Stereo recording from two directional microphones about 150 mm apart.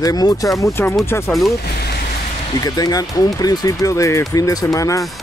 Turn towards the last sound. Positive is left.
turn(degrees=20)  # may be behind; listen again after turning